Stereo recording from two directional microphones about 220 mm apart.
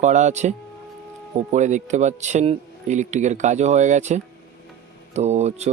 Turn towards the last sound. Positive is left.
turn(degrees=-30)  # may be behind; listen again after turning